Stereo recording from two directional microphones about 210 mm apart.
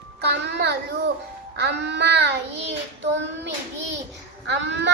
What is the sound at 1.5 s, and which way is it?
Child singing, 55° right (ahead or behind).